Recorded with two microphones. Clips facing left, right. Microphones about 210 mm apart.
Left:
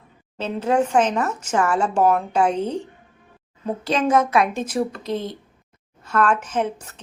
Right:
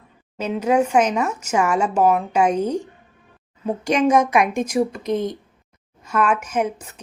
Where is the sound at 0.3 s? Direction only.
10° right (ahead or behind).